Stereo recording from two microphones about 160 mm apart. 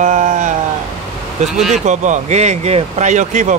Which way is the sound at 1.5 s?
Centre (ahead or behind).